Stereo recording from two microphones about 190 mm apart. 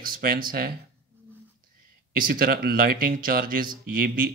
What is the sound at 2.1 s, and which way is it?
Speech, 50° right (ahead or behind).